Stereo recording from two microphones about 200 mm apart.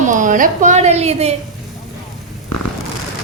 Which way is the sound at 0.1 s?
40° right (ahead or behind).